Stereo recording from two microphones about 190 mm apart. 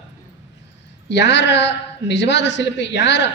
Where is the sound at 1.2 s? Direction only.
70° left (ahead or behind).